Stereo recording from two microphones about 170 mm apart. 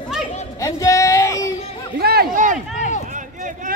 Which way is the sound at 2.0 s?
65° right (ahead or behind).